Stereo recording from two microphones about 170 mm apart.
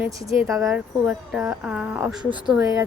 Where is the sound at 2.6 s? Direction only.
20° right (ahead or behind).